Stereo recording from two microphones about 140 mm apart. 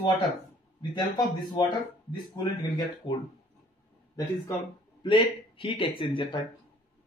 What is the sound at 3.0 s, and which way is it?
Speech, 30° left (ahead or behind).